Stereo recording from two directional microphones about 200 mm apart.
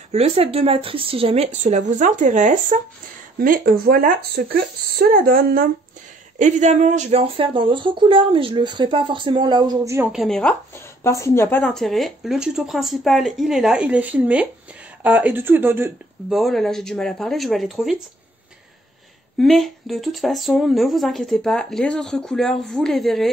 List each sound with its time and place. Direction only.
0.1 s speech: 30° right (ahead or behind); by 10.5 s centre (ahead or behind)
11.1 s speech: 15° left (ahead or behind); by 16.3 s 10° right (ahead or behind)
16.3 s speech: centre (ahead or behind)
19.3 s speech: centre (ahead or behind)